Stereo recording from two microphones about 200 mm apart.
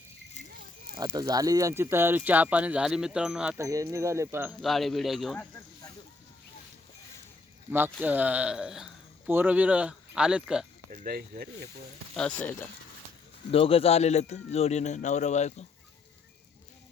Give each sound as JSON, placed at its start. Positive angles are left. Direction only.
{"t": 0.9, "sound": "speech", "side_deg": -20}
{"t": 3.6, "sound": "speech", "side_deg": -15}
{"t": 4.6, "sound": "speech", "side_deg": 0}
{"t": 7.7, "sound": "speech", "side_deg": -10}
{"t": 10.9, "sound": "speech", "side_deg": -45}
{"t": 12.1, "sound": "speech", "side_deg": 5}
{"t": 13.5, "sound": "speech", "side_deg": 30}